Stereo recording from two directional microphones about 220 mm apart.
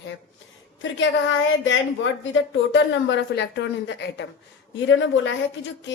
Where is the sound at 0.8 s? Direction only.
55° left (ahead or behind).